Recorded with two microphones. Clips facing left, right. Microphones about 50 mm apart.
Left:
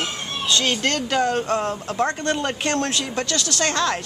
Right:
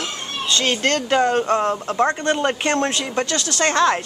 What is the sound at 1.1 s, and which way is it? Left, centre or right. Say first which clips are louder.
Speech: right 4 dB; centre.